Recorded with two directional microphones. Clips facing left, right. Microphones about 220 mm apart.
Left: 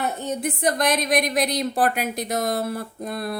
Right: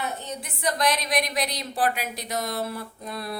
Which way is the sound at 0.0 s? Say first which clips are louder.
Left 7 dB; 50° left (ahead or behind).